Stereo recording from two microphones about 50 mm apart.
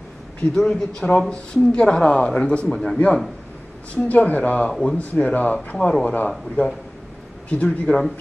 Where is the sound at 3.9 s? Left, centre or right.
Left.